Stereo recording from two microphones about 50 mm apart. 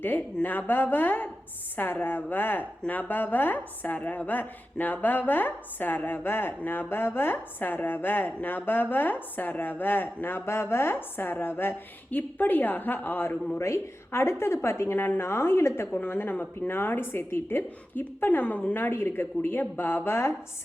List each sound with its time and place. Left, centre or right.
0.0 s a woman's voice: left
13.6 s a woman's voice: left
14.9 s speech: left
15.3 s a woman's voice: left
15.9 s speech: left
18.3 s speech: left